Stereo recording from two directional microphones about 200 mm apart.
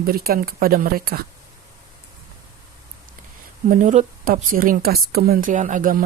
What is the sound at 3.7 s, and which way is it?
Speech, 35° right (ahead or behind).